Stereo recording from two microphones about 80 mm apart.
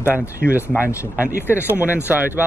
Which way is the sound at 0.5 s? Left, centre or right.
Right.